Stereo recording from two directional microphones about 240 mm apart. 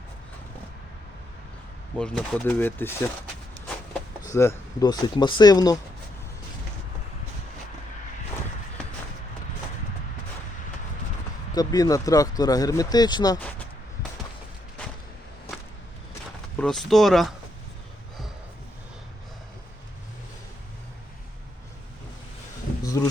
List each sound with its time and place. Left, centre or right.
2.0 s speech: centre
4.3 s speech: centre
11.5 s speech: centre
15.5 s a sound: centre
16.6 s speech: centre
22.8 s a sound: centre